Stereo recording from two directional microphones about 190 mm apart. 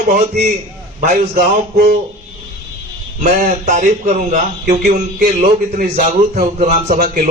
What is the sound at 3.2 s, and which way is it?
A man's voice, 40° right (ahead or behind).